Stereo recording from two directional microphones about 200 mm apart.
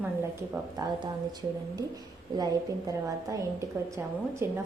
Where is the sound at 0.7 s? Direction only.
20° right (ahead or behind).